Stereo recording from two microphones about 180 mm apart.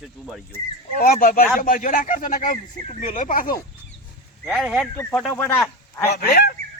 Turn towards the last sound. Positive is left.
turn(degrees=60)  # may be behind; listen again after turning